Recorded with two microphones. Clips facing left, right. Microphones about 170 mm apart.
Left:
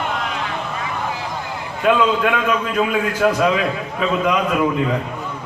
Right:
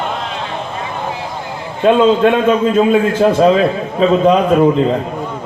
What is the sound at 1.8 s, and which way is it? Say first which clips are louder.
A man's voice: right 7 dB; 25° right (ahead or behind).